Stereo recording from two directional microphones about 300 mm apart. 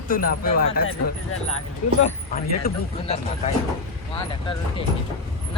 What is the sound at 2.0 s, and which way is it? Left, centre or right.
Speech, left.